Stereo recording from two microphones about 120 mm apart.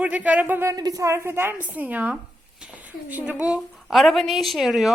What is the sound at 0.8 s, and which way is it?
Speech, 30° right (ahead or behind).